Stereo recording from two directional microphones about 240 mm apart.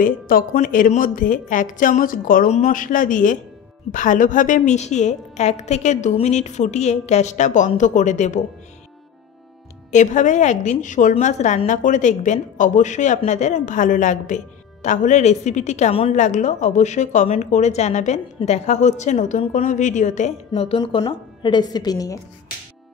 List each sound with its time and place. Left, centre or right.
0.0 s a woman's voice: left
9.8 s a woman's voice: left; by 22.2 s centre